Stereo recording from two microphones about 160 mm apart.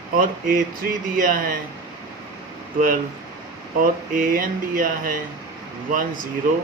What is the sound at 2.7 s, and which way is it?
Speech, 60° right (ahead or behind).